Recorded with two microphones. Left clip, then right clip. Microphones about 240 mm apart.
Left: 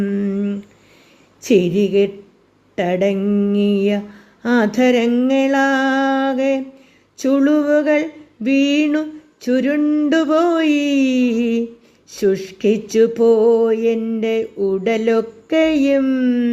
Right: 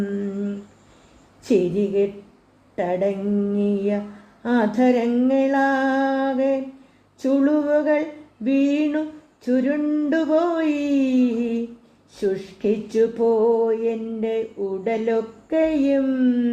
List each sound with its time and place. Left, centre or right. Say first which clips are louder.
0.1 s humming: left 6 dB; left
1.4 s mantra: left 5 dB; left